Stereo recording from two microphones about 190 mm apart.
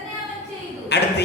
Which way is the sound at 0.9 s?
65° left (ahead or behind).